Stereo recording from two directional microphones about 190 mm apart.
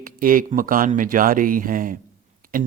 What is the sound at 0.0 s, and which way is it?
Speech, 45° right (ahead or behind).